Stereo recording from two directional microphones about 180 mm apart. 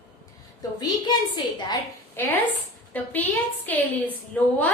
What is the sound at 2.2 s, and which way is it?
A woman's voice, 10° left (ahead or behind).